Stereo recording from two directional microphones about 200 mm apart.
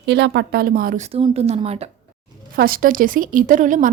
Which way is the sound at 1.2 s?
30° right (ahead or behind).